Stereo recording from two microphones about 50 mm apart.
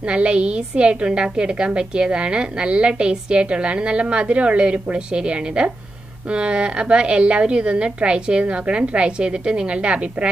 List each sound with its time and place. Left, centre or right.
0.1 s a woman's voice: right